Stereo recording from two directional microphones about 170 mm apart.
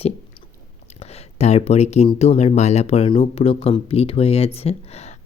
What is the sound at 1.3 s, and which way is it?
Speech, 40° left (ahead or behind).